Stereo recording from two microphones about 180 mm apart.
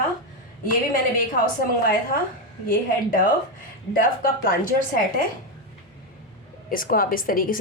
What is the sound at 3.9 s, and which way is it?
Speech, 50° left (ahead or behind).